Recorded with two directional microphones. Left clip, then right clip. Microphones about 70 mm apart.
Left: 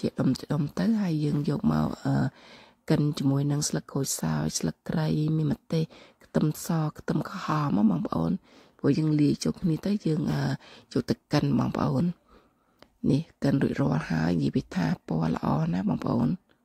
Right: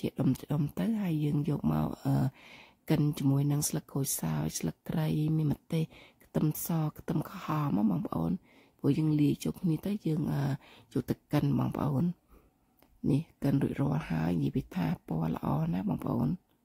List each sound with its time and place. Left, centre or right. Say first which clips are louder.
0.0 s speech: left 4 dB; left
7.7 s speech: left 5 dB; centre
8.1 s speech: left 5 dB; left
8.8 s a sound: left 5 dB; left
9.1 s speech: left 4 dB; left
10.9 s speech: left 6 dB; left
13.1 s speech: left 5 dB; left